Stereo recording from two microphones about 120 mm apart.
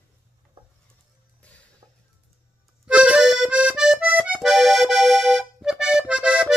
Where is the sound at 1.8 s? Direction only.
35° right (ahead or behind).